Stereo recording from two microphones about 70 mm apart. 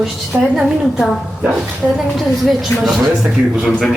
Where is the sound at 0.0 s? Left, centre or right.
Centre.